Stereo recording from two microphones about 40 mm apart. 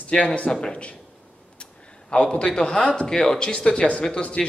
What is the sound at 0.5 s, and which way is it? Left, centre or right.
Speech, centre.